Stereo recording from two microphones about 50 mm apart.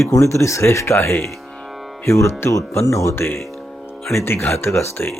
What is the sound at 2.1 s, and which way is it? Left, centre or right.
Speech, left.